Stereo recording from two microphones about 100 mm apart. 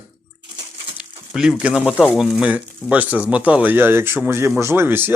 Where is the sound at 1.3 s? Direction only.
5° right (ahead or behind).